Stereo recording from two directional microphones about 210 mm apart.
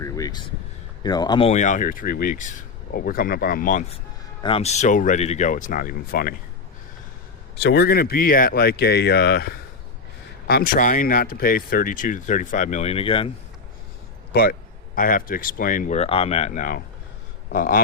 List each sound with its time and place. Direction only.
0.0 s a sound: 20° left (ahead or behind)
1.0 s speech: 20° left (ahead or behind); by 6.3 s 45° left (ahead or behind)
7.6 s speech: 50° left (ahead or behind); by 13.3 s 25° left (ahead or behind)
14.3 s speech: 50° left (ahead or behind)